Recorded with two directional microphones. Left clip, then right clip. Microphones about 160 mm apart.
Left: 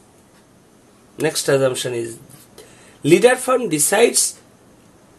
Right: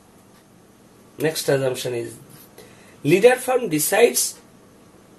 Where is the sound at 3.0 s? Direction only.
55° left (ahead or behind).